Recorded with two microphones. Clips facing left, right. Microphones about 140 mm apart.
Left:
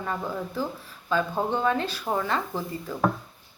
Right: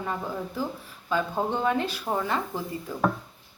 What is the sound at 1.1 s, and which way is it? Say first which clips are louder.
A woman's voice: left 1 dB; 15° right (ahead or behind).